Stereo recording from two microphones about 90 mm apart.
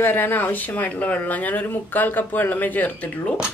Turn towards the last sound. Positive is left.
turn(degrees=20)  # may be behind; listen again after turning